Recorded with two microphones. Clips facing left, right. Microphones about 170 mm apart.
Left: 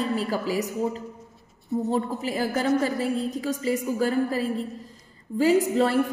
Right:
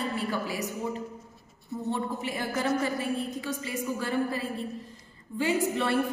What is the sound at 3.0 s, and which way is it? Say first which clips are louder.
Speech: left 5 dB; 90° left.